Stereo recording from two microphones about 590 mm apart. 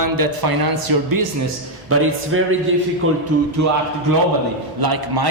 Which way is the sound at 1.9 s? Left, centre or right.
Right.